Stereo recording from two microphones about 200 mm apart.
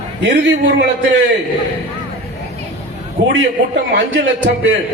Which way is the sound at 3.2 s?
60° right (ahead or behind).